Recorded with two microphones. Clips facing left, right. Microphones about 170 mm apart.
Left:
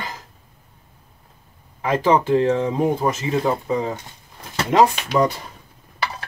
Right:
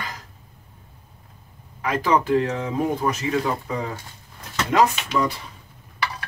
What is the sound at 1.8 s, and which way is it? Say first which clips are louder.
Speech: left 3 dB; 25° left (ahead or behind).